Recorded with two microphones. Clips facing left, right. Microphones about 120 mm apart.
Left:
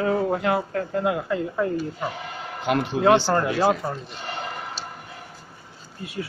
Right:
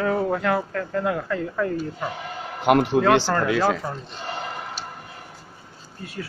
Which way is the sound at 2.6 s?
65° right (ahead or behind).